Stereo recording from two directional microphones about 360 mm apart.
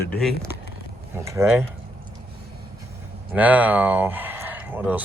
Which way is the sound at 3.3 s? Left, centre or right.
Centre.